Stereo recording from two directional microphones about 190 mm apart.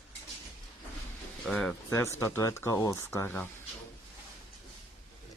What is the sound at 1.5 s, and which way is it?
Speech, 5° left (ahead or behind).